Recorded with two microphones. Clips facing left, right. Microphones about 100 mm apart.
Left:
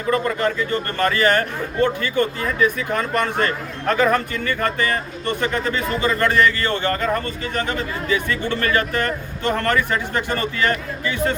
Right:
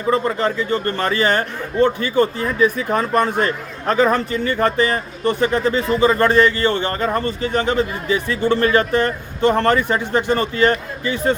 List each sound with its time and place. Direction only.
0.1 s a man's voice: 30° right (ahead or behind)